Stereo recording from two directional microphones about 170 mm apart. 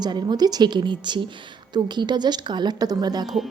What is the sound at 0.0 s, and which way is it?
Speech, 25° right (ahead or behind).